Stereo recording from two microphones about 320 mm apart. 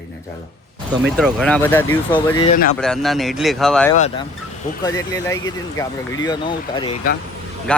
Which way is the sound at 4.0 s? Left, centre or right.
Centre.